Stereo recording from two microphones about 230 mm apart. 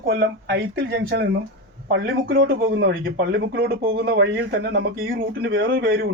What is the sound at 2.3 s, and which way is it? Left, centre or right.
Speech, right.